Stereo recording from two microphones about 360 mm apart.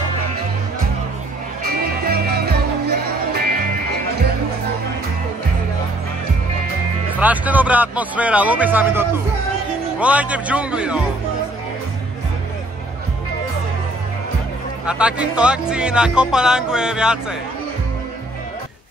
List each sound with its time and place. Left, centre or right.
1.6 s music: right
7.2 s speech: centre
14.9 s speech: centre